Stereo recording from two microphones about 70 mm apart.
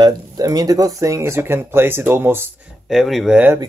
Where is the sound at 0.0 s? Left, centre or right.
Right.